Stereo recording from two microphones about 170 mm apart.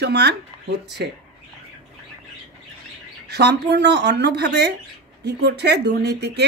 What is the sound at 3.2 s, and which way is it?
Speech, 75° right (ahead or behind).